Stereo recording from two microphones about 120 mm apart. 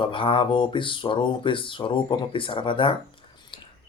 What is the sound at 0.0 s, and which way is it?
Speech, 45° left (ahead or behind).